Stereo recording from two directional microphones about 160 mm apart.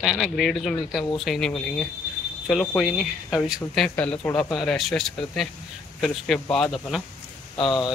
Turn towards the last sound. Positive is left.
turn(degrees=30)  # may be behind; listen again after turning